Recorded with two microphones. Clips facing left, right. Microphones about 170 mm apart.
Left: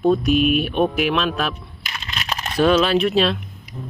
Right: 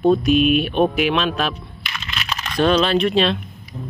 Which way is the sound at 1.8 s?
35° left (ahead or behind).